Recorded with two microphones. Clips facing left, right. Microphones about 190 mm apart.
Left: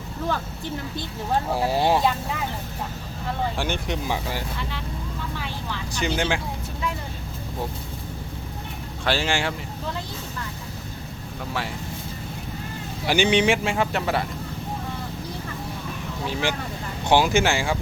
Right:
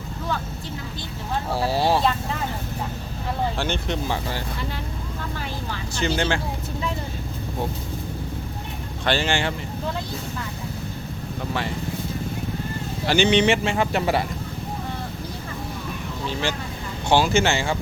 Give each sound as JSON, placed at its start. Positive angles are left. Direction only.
{"t": 1.5, "sound": "speech", "side_deg": 15}
{"t": 3.6, "sound": "speech", "side_deg": 10}
{"t": 6.0, "sound": "speech", "side_deg": 10}
{"t": 9.0, "sound": "speech", "side_deg": 5}
{"t": 13.1, "sound": "speech", "side_deg": 10}
{"t": 16.3, "sound": "speech", "side_deg": 15}